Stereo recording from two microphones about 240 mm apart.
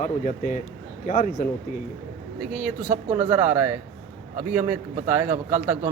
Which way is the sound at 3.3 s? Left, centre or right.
Centre.